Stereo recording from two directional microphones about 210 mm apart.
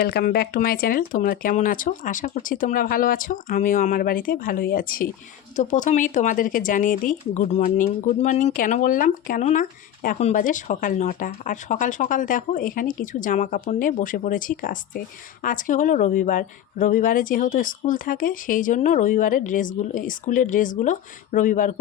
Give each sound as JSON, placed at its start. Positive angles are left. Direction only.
{"t": 0.0, "sound": "speech", "side_deg": 50}